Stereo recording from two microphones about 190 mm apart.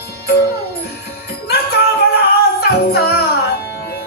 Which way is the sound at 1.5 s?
60° left (ahead or behind).